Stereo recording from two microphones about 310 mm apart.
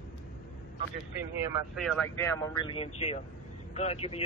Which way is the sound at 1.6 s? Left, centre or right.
Centre.